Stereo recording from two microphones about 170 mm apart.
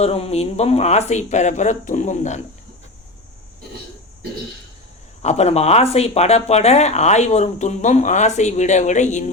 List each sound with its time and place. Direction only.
0.0 s speech: 40° left (ahead or behind)
5.2 s speech: 40° left (ahead or behind)